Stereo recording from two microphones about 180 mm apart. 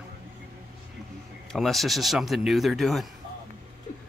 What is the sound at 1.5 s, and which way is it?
Speech, centre (ahead or behind).